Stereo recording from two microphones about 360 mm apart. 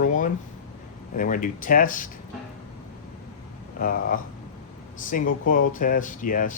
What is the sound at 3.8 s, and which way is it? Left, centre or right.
Speech, left.